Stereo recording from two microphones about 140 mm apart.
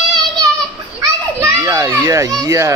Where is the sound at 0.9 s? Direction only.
25° right (ahead or behind).